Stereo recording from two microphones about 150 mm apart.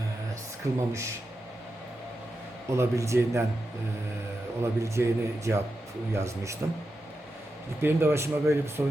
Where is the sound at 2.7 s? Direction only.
20° right (ahead or behind).